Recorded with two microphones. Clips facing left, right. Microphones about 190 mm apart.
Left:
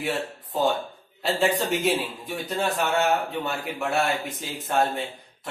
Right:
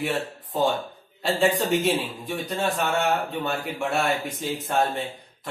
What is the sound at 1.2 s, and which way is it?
A man's voice, centre (ahead or behind).